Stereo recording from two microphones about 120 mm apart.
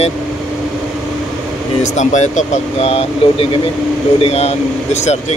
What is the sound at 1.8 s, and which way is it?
Speech, 80° left.